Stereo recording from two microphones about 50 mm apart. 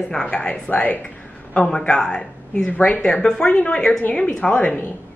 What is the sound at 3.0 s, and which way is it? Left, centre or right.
A woman's voice, centre.